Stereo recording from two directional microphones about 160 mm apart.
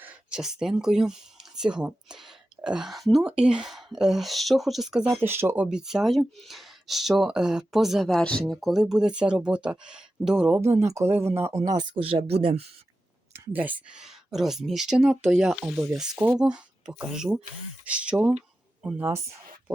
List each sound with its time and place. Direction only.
0.0 s speech: 5° right (ahead or behind)
5.0 s speech: 15° right (ahead or behind)
5.6 s speech: 5° right (ahead or behind)
10.8 s speech: 15° right (ahead or behind); by 12.6 s 35° right (ahead or behind)
13.3 s speech: 15° right (ahead or behind)
19.0 s speech: 20° right (ahead or behind)